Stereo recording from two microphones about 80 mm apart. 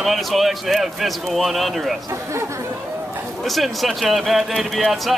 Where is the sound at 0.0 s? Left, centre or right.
Centre.